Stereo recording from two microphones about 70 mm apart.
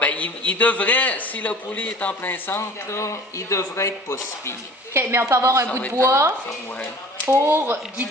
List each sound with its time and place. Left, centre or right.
0.0 s a man's voice: centre; by 4.5 s left
4.9 s speech: right